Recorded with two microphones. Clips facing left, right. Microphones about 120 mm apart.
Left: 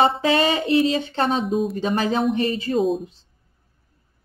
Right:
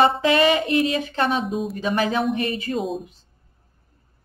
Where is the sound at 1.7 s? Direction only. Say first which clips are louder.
Left 1 dB; 35° left (ahead or behind).